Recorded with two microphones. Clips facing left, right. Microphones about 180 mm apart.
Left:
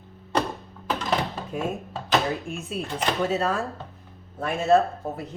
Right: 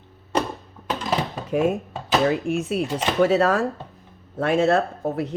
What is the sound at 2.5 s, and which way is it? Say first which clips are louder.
Speech: right 10 dB; 15° right (ahead or behind).